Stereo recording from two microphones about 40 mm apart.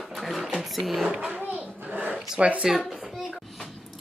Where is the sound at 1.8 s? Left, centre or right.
Right.